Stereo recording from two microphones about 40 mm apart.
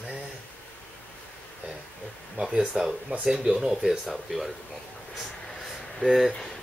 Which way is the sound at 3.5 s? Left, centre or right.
Centre.